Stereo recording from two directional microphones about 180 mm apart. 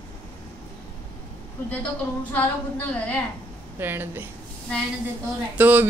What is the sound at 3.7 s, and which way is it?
Speech, 10° right (ahead or behind).